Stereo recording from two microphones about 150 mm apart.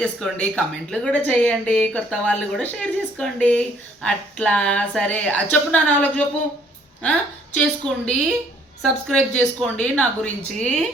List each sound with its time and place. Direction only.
0.0 s speech: 5° left (ahead or behind)